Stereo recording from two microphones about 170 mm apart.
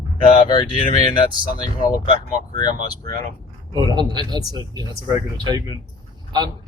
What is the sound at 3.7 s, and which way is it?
Speech, 25° right (ahead or behind).